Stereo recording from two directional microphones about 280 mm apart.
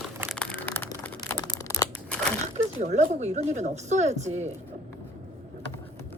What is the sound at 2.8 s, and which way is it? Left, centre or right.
Speech, right.